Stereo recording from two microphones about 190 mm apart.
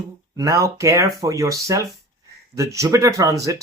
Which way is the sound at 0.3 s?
15° right (ahead or behind).